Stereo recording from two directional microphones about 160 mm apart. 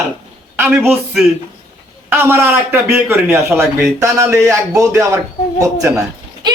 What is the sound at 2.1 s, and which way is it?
A man's voice, 15° right (ahead or behind).